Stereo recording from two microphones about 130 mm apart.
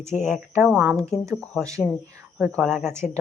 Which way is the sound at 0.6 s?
5° right (ahead or behind).